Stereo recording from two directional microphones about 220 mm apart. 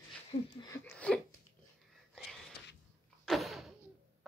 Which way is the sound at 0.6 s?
15° left (ahead or behind).